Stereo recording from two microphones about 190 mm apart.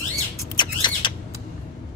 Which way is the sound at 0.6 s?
25° left (ahead or behind).